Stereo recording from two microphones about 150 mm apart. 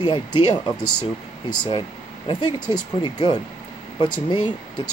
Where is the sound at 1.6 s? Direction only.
35° left (ahead or behind).